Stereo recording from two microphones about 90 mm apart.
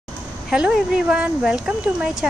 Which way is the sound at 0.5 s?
10° right (ahead or behind).